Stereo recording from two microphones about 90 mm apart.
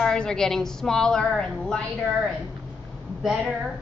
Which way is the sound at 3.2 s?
5° right (ahead or behind).